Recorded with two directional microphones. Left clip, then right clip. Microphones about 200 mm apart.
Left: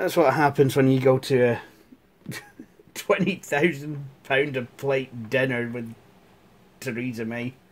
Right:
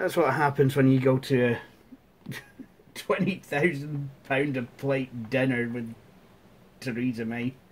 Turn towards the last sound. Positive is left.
turn(degrees=40)  # may be behind; listen again after turning